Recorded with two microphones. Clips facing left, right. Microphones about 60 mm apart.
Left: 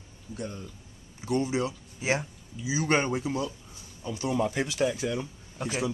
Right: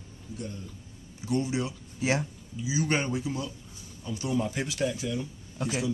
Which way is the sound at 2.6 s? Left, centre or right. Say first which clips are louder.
Left 2 dB; left.